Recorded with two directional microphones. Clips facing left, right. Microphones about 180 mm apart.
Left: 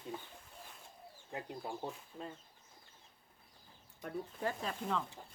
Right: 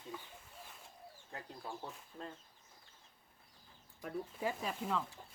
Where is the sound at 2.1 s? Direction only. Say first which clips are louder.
Left 2 dB; 10° left (ahead or behind).